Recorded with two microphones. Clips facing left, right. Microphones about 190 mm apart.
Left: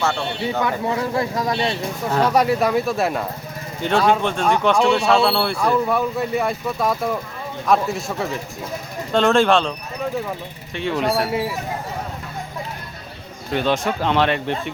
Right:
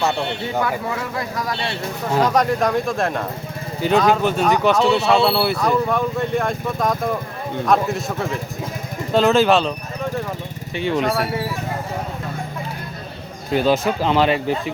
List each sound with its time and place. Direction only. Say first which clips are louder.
0.0 s speech: right 1 dB; 15° right (ahead or behind)
0.6 s speech: left 3 dB; 25° left (ahead or behind)
2.2 s speech: left 1 dB; 10° left (ahead or behind)
5.5 s speech: even; 10° left (ahead or behind)
11.1 s speech: left 1 dB; 15° left (ahead or behind)
13.5 s speech: right 3 dB; 5° right (ahead or behind)